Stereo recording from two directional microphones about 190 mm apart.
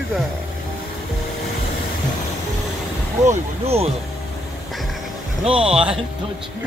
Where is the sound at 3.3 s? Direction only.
35° right (ahead or behind).